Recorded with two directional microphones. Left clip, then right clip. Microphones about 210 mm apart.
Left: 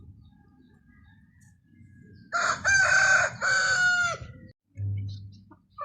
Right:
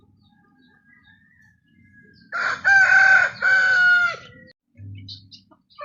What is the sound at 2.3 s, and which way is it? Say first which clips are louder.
Chicken: right 6 dB; 50° left (ahead or behind).